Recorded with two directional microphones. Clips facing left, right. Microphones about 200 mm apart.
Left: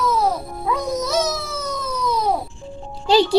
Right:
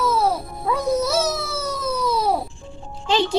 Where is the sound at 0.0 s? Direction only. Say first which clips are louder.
Even; 5° right (ahead or behind).